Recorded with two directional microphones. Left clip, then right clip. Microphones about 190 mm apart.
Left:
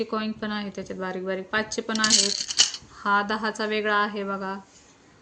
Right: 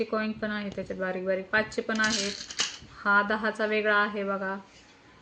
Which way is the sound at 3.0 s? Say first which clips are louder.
Left 1 dB; 35° left (ahead or behind).